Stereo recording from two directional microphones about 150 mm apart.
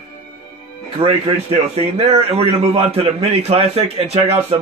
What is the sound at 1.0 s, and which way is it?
A man's voice, 45° right (ahead or behind).